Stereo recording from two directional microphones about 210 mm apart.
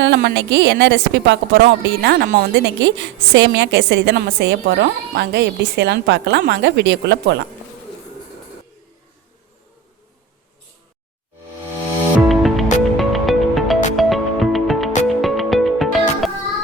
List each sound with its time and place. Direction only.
0.0 s a woman's voice: 55° right (ahead or behind)
12.3 s music: centre (ahead or behind)